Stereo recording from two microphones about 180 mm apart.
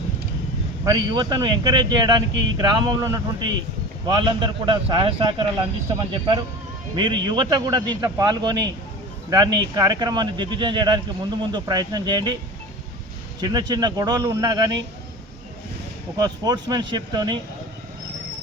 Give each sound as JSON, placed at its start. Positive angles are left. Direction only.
{"t": 0.9, "sound": "speech", "side_deg": -25}
{"t": 13.4, "sound": "speech", "side_deg": -20}
{"t": 16.1, "sound": "speech", "side_deg": -20}